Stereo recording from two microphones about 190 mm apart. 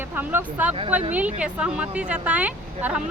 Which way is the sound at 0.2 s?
10° right (ahead or behind).